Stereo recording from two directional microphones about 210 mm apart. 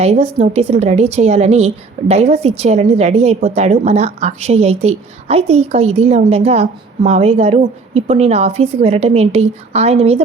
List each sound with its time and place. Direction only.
0.0 s a woman's voice: 30° right (ahead or behind)